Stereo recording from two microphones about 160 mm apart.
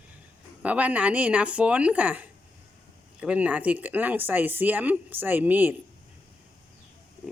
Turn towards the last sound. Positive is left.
turn(degrees=-10)  # may be behind; listen again after turning